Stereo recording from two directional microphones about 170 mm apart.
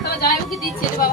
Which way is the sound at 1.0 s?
55° left (ahead or behind).